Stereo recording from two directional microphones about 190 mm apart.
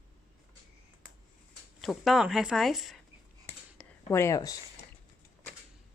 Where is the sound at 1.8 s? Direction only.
Centre (ahead or behind).